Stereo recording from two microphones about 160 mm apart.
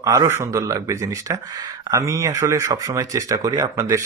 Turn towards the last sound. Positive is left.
turn(degrees=-20)  # may be behind; listen again after turning